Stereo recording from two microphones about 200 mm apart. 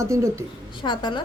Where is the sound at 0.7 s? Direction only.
25° left (ahead or behind).